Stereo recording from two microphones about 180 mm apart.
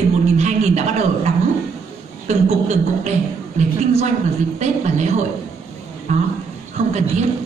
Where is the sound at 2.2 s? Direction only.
40° right (ahead or behind).